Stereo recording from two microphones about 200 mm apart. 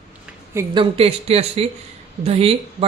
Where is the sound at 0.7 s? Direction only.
25° right (ahead or behind).